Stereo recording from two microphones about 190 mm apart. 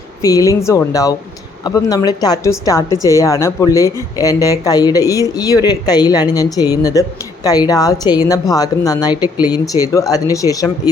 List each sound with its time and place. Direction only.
0.2 s a woman's voice: 20° left (ahead or behind)